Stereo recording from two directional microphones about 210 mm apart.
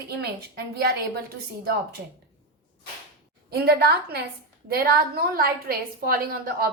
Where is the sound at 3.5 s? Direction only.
50° right (ahead or behind).